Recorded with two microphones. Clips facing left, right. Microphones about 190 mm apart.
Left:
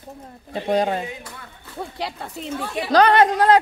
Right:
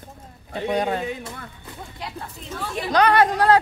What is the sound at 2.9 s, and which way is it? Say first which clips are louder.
Speech: left 3 dB; 25° left (ahead or behind).